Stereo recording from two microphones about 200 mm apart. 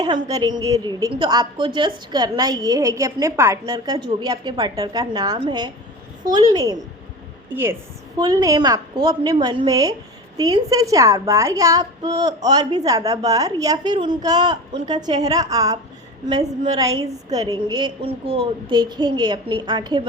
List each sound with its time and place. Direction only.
0.3 s a woman's voice: 20° right (ahead or behind)
17.3 s a woman's voice: 20° right (ahead or behind)